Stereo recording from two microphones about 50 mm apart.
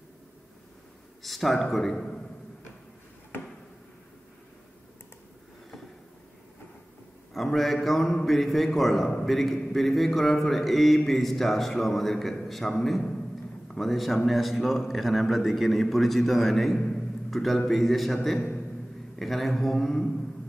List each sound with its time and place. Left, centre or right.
1.2 s speech: centre
3.3 s a sound: left
7.3 s a man's voice: centre